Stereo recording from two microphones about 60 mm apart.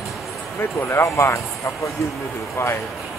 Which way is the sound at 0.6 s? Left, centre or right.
Left.